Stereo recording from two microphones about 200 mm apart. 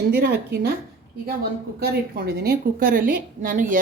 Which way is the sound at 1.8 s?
50° right (ahead or behind).